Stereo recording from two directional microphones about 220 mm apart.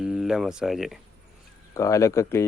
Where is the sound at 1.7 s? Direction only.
15° left (ahead or behind).